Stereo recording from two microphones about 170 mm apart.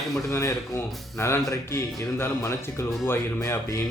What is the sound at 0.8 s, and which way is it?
Speech, centre (ahead or behind).